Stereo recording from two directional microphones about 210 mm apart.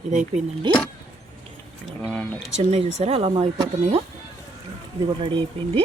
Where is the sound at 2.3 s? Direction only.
30° right (ahead or behind).